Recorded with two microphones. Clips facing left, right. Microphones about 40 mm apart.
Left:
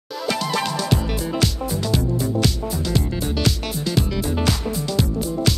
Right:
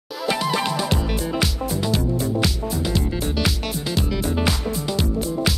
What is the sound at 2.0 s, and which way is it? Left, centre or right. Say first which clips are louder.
Music: even; right.